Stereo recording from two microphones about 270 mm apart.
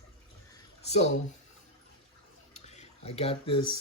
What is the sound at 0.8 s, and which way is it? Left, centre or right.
Speech, left.